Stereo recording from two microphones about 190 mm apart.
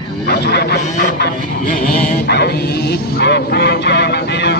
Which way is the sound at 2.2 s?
60° left (ahead or behind).